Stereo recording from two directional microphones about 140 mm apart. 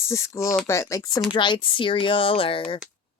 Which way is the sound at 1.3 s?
35° left (ahead or behind).